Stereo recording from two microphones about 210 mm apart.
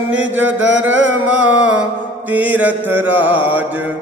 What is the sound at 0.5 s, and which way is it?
Chant, 60° right (ahead or behind).